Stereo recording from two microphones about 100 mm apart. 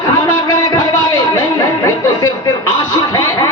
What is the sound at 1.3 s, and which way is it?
Music, 35° left (ahead or behind).